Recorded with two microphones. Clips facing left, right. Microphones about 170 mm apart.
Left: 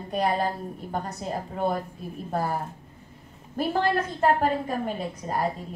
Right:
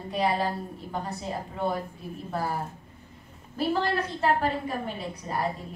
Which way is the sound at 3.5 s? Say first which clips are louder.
Left 2 dB; 50° left (ahead or behind).